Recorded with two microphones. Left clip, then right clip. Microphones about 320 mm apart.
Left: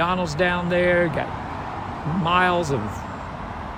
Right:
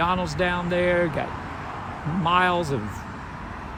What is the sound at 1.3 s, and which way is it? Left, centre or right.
Vehicle, left.